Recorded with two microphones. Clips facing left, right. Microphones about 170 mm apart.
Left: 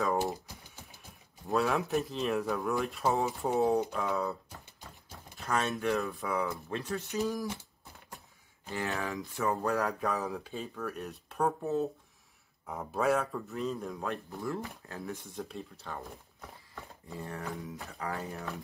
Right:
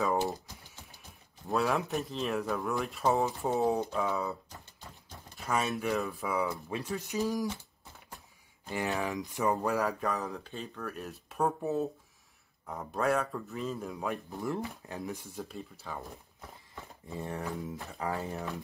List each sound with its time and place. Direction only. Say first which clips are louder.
1.5 s speech: left 1 dB; centre (ahead or behind)
5.4 s speech: even; 5° right (ahead or behind)
6.4 s speech: right 1 dB; 15° right (ahead or behind)
8.6 s speech: right 2 dB; 15° right (ahead or behind)
9.7 s speech: even; centre (ahead or behind)
14.0 s speech: right 3 dB; 15° right (ahead or behind)
15.3 s speech: left 1 dB; 5° right (ahead or behind)
17.1 s speech: right 3 dB; 20° right (ahead or behind)